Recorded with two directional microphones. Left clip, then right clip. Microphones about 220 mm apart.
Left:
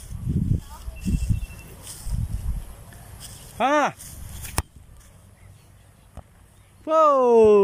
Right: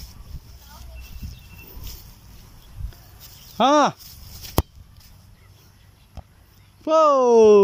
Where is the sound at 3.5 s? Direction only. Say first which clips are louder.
Right 4 dB; 20° right (ahead or behind).